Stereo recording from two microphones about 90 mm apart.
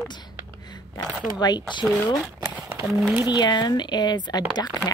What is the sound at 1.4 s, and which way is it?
Speech, 50° left (ahead or behind).